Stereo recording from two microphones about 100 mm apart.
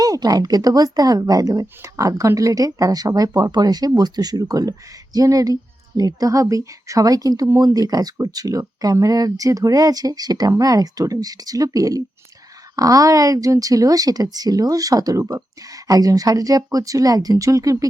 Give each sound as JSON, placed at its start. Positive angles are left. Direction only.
{"t": 0.0, "sound": "speech", "side_deg": -40}